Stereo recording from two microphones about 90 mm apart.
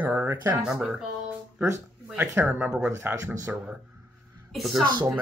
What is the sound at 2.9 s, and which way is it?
Speech, 30° right (ahead or behind).